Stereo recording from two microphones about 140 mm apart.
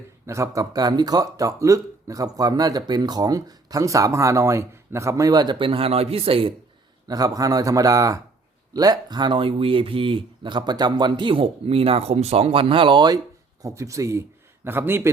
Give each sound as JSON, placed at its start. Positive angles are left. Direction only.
{"t": 0.3, "sound": "speech", "side_deg": -20}
{"t": 7.1, "sound": "speech", "side_deg": -25}
{"t": 13.6, "sound": "speech", "side_deg": -25}